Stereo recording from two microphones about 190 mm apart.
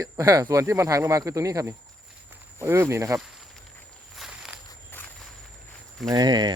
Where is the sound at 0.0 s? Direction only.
20° right (ahead or behind).